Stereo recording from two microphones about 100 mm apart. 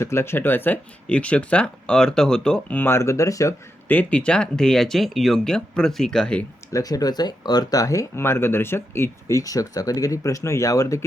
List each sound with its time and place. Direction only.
0.0 s speech: 25° left (ahead or behind)
3.8 s speech: 15° left (ahead or behind)
6.7 s speech: 35° left (ahead or behind)